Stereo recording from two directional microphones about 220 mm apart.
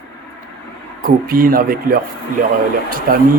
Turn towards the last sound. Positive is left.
turn(degrees=-40)  # may be behind; listen again after turning